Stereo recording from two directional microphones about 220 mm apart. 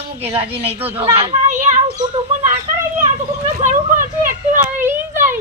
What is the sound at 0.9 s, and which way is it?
Children playing, 25° right (ahead or behind).